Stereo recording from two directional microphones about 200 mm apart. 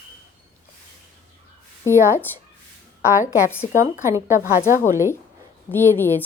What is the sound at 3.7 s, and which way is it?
Speech, 15° right (ahead or behind).